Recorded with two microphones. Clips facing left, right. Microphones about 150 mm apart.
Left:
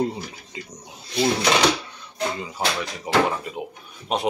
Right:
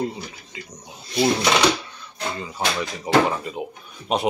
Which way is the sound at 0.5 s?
35° left (ahead or behind).